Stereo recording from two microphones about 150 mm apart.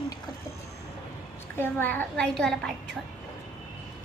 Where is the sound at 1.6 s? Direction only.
15° left (ahead or behind).